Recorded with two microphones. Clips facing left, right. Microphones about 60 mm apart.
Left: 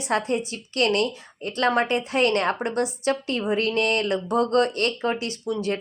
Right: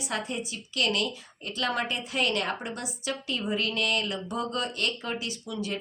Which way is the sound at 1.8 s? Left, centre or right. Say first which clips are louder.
Left 7 dB; left.